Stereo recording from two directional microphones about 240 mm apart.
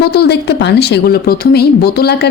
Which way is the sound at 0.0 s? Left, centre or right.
Left.